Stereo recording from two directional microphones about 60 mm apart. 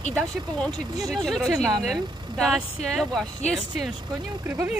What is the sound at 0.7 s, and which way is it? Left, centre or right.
Speech, right.